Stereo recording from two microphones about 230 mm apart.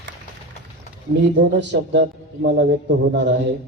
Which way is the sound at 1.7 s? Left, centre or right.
Right.